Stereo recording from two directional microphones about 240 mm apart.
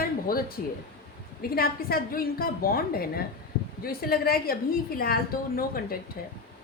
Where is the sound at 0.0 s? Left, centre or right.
Left.